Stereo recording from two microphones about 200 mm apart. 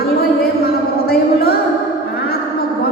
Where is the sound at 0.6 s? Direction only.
50° left (ahead or behind).